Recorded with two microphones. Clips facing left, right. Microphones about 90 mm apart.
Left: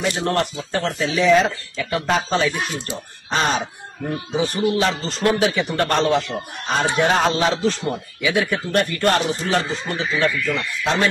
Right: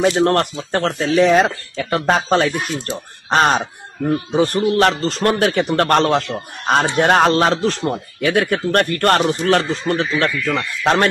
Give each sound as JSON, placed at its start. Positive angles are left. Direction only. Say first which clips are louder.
{"t": 0.0, "sound": "speech", "louder": "right 6 dB", "side_deg": -45}